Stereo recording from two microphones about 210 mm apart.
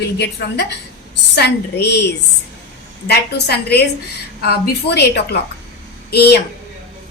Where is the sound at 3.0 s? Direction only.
50° left (ahead or behind).